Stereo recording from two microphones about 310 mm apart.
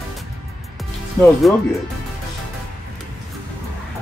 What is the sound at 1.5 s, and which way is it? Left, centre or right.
Speech, centre.